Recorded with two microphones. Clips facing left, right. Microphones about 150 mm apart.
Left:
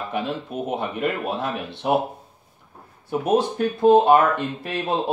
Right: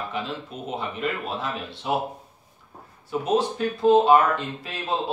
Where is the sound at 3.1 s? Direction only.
55° left (ahead or behind).